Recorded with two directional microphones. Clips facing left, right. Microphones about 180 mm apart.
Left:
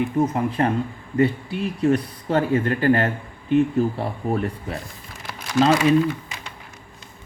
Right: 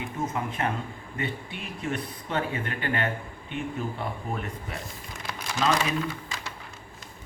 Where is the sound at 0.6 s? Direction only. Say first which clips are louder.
Left 8 dB; 35° left (ahead or behind).